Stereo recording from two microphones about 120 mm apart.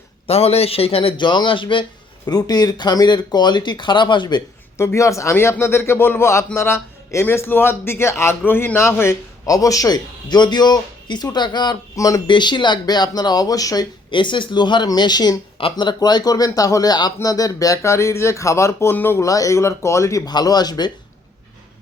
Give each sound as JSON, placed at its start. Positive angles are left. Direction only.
{"t": 0.3, "sound": "a man's voice", "side_deg": 55}
{"t": 2.2, "sound": "speech", "side_deg": 35}
{"t": 4.8, "sound": "a man's voice", "side_deg": 25}
{"t": 12.3, "sound": "a man's voice", "side_deg": 40}